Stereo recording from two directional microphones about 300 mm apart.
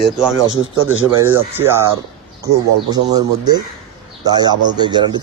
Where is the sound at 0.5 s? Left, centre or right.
Right.